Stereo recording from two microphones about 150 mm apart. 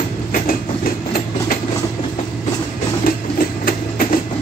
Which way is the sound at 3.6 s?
70° left (ahead or behind).